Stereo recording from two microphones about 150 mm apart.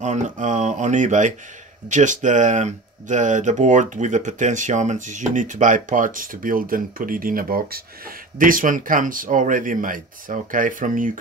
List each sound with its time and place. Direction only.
0.0 s speech: 50° right (ahead or behind); by 7.8 s 75° right (ahead or behind)
8.4 s speech: 65° right (ahead or behind)